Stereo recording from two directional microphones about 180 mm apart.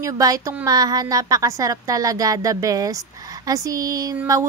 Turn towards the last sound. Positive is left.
turn(degrees=-20)  # may be behind; listen again after turning